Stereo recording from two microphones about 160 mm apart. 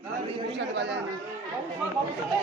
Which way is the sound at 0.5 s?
90° right.